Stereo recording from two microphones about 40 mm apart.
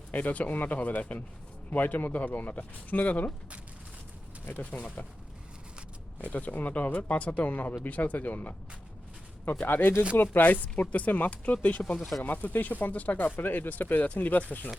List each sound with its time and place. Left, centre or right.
0.1 s speech: left
4.6 s speech: left
6.2 s speech: left
9.6 s speech: left
10.2 s speech: left
11.3 s speech: left